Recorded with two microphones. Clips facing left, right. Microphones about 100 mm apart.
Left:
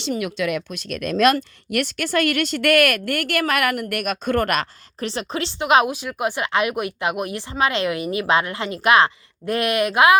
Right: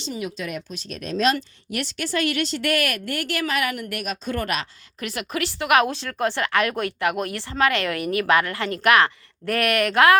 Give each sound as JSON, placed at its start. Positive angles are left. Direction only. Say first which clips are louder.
{"t": 0.0, "sound": "speech", "louder": "left 6 dB", "side_deg": 70}
{"t": 4.9, "sound": "speech", "louder": "left 2 dB", "side_deg": 30}